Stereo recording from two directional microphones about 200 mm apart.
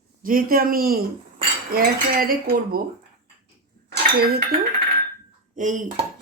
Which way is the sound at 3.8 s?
50° right (ahead or behind).